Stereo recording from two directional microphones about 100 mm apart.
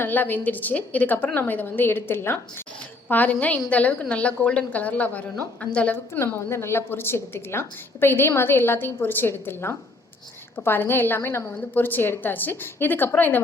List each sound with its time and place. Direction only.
0.0 s a woman's voice: 20° left (ahead or behind)
6.1 s a woman's voice: 25° left (ahead or behind)